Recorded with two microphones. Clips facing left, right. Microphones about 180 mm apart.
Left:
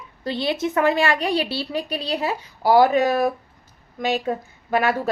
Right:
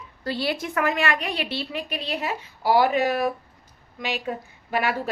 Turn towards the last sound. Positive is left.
turn(degrees=40)  # may be behind; listen again after turning